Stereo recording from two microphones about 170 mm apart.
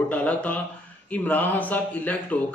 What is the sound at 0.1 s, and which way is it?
A man's voice, 10° left (ahead or behind).